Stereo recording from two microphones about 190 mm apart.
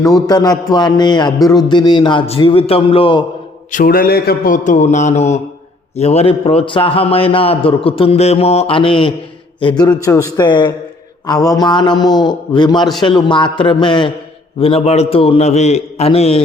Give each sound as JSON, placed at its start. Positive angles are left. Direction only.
{"t": 0.0, "sound": "a man's voice", "side_deg": 20}
{"t": 3.7, "sound": "a man's voice", "side_deg": 45}